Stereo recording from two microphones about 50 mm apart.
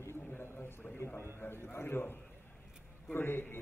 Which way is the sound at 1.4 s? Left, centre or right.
Left.